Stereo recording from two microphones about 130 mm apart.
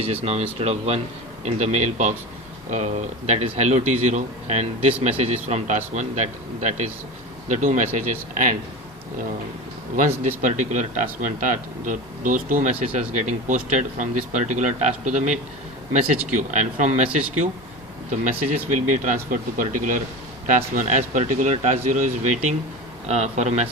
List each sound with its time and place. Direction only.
0.0 s a man's voice: 50° right (ahead or behind); by 8.5 s 80° right
10.1 s speech: 65° right (ahead or behind); by 12.7 s 80° right
13.0 s a man's voice: 65° right (ahead or behind)
18.7 s speech: 80° right
20.7 s speech: 75° right (ahead or behind)
23.0 s a man's voice: 55° right (ahead or behind)